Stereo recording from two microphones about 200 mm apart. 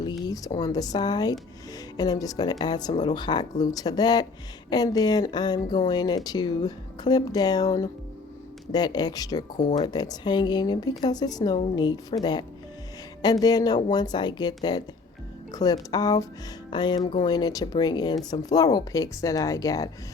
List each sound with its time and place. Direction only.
0.3 s speech: 20° left (ahead or behind)